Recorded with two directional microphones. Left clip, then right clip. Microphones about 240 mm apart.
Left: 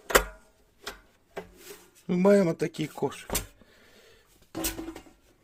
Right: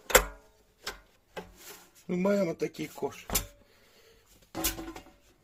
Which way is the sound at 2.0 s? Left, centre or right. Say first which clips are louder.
Left 6 dB; left.